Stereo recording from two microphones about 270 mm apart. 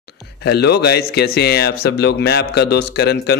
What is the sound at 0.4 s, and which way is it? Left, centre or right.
Speech, left.